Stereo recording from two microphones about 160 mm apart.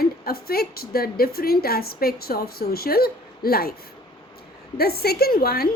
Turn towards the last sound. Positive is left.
turn(degrees=75)  # may be behind; listen again after turning